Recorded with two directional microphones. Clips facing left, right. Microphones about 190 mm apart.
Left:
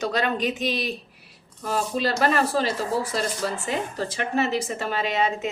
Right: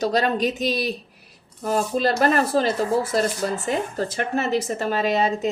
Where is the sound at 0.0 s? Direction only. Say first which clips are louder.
Right 4 dB; 40° right (ahead or behind).